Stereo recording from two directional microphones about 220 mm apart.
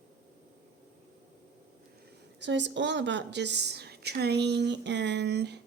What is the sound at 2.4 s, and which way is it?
A woman's voice, 55° right (ahead or behind).